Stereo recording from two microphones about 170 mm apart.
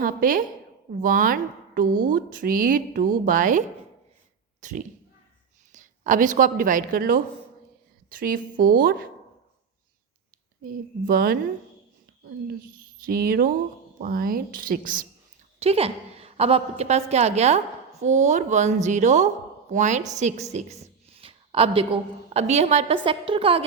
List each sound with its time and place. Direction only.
0.0 s a woman's voice: 55° right (ahead or behind)
4.6 s a woman's voice: 50° right (ahead or behind)
11.0 s speech: 55° right (ahead or behind)
13.1 s speech: 60° right (ahead or behind)
15.5 s a woman's voice: 35° right (ahead or behind)
20.5 s a sound: 40° right (ahead or behind)
22.3 s a woman's voice: 40° right (ahead or behind)